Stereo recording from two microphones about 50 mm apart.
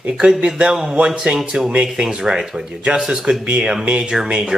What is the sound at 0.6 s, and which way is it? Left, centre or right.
A man's voice, centre.